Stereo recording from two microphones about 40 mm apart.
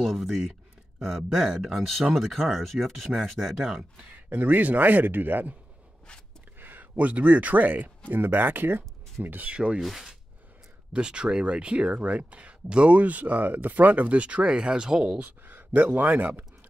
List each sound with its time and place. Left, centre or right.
0.0 s speech: centre
4.3 s speech: right
6.6 s a sound: right
7.0 s speech: right
8.1 s speech: right
9.5 s speech: right
9.8 s speech: centre
10.9 s speech: right
15.4 s speech: right